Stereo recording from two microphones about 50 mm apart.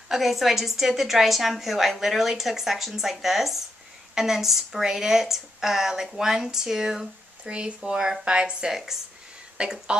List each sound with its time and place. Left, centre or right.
0.1 s a woman's voice: centre
7.4 s speech: right